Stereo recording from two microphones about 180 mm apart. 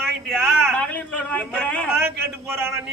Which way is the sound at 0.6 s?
5° left (ahead or behind).